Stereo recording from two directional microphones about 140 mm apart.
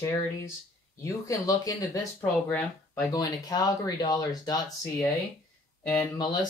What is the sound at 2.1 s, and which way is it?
Speech, 10° left (ahead or behind).